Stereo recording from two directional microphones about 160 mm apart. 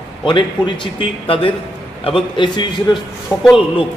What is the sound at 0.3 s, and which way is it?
A man's voice, 30° left (ahead or behind).